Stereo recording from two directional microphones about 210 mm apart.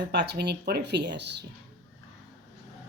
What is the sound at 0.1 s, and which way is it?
Speech, 55° right (ahead or behind).